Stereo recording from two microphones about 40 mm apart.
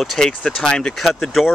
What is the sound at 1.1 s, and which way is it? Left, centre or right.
Speech, centre.